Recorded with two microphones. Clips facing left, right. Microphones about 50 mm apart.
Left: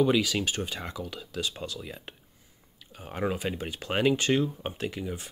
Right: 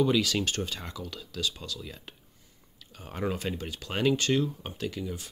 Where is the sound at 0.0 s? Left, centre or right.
Centre.